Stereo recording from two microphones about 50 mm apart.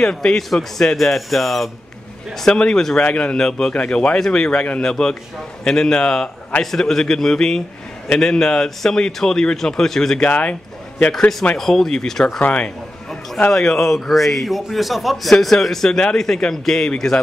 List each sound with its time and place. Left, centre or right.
0.0 s a man's voice: centre
2.3 s a man's voice: centre
10.2 s a man's voice: left
11.5 s a man's voice: centre
12.4 s a man's voice: left
13.5 s a man's voice: centre